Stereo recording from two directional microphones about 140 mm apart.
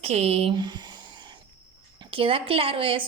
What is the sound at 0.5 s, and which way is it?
Speech, 30° right (ahead or behind).